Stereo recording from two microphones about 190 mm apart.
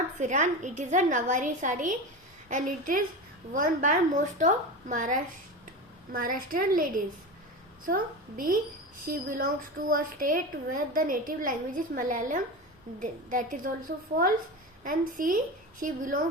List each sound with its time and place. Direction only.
0.2 s a woman's voice: 40° right (ahead or behind)